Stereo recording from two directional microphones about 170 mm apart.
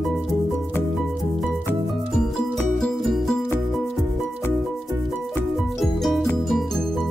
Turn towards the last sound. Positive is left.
turn(degrees=0)  # may be behind; listen again after turning